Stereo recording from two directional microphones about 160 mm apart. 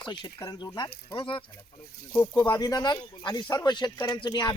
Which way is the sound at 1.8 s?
75° left (ahead or behind).